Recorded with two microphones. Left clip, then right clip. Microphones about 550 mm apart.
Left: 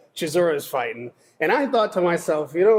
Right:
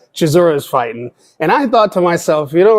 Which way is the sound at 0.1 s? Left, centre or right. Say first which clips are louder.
Right 9 dB; right.